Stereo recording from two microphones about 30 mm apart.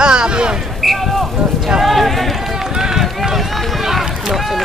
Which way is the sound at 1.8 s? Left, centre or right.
Centre.